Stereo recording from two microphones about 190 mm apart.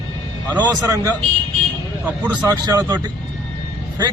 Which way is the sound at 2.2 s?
5° left (ahead or behind).